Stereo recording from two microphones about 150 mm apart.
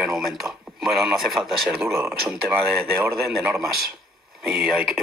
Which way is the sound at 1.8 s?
15° right (ahead or behind).